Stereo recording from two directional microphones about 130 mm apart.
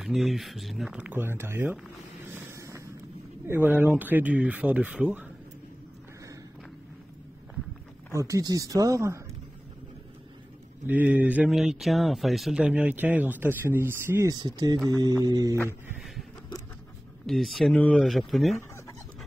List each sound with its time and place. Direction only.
0.0 s speech: centre (ahead or behind); by 1.8 s 15° right (ahead or behind)
2.3 s a sound: 20° right (ahead or behind)
3.4 s speech: 15° right (ahead or behind)
8.1 s speech: 25° right (ahead or behind)
10.9 s speech: 15° right (ahead or behind)
11.5 s speech: centre (ahead or behind); by 14.3 s 15° right (ahead or behind)
14.3 s speech: 30° right (ahead or behind)
17.3 s speech: centre (ahead or behind)